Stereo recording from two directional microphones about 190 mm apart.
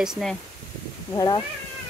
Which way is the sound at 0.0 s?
Centre (ahead or behind).